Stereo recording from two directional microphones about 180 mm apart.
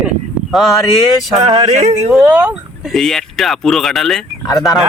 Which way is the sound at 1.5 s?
35° right (ahead or behind).